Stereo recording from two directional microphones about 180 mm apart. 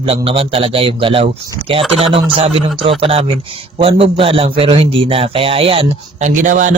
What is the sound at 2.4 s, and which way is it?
A man's voice, 30° right (ahead or behind).